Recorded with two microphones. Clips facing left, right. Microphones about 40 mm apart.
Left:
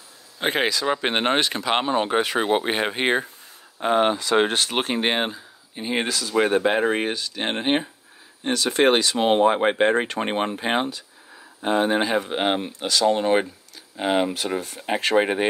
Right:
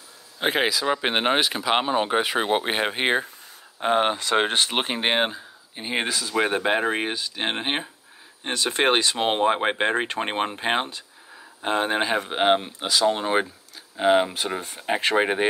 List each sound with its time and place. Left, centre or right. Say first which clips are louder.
0.4 s speech: even; centre
3.8 s speech: left 1 dB; centre
4.2 s speech: left 2 dB; right
4.5 s speech: even; right
8.5 s speech: left 3 dB; right
11.6 s speech: left 3 dB; right
12.0 s speech: left 1 dB; right
12.8 s speech: left 5 dB; centre